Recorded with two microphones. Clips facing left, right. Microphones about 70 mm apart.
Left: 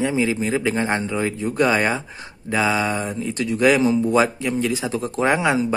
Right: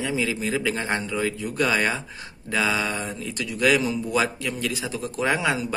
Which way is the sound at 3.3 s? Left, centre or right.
Left.